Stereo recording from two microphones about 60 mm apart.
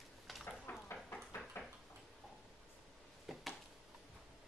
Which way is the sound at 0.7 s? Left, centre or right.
Left.